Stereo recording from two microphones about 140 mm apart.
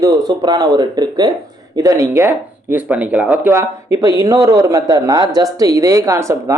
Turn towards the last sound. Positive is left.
turn(degrees=-20)  # may be behind; listen again after turning